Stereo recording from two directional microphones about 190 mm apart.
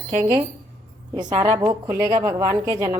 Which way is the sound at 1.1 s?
20° right (ahead or behind).